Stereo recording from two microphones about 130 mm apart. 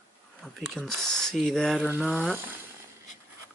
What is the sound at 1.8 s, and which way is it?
Speech, 10° right (ahead or behind).